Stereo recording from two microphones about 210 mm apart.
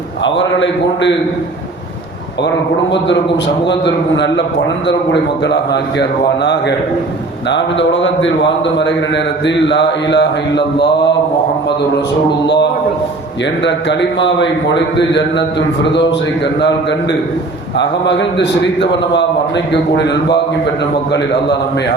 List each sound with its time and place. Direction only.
0.3 s a man's voice: 60° left (ahead or behind)
3.7 s a man's voice: 55° left (ahead or behind)
13.7 s a man's voice: 60° left (ahead or behind)